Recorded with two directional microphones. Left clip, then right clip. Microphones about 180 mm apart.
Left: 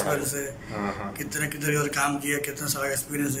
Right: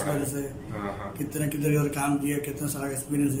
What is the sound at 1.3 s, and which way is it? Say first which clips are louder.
A man's voice: left 1 dB; 20° right (ahead or behind).